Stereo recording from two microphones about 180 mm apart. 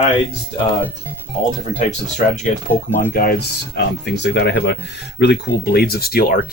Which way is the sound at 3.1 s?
55° left (ahead or behind).